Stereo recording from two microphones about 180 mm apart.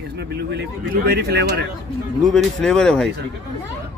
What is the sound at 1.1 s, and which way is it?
Speech, 65° right (ahead or behind).